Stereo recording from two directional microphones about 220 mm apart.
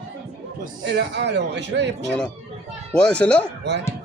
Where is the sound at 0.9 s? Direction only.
50° right (ahead or behind).